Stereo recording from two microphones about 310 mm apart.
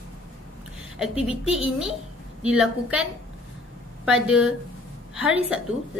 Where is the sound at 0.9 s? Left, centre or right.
Centre.